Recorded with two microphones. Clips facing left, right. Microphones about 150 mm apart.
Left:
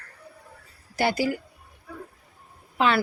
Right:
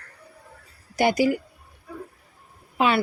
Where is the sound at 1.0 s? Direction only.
15° right (ahead or behind).